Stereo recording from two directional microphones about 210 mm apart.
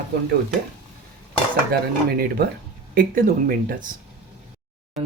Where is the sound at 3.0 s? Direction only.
45° right (ahead or behind).